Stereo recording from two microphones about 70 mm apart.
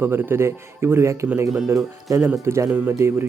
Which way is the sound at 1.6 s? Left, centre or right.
Right.